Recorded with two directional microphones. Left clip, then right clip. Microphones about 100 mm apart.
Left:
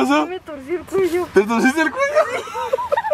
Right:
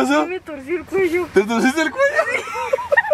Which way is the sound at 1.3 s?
20° right (ahead or behind).